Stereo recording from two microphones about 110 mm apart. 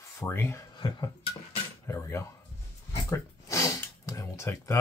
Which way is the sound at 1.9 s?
25° left (ahead or behind).